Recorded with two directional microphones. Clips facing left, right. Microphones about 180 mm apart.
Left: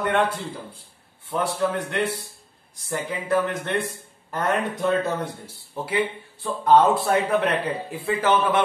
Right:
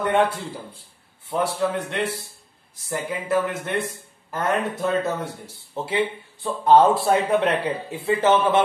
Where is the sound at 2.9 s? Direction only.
5° right (ahead or behind).